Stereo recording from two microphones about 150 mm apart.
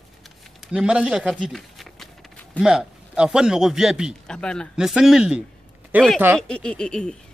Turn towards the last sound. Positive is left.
turn(degrees=5)  # may be behind; listen again after turning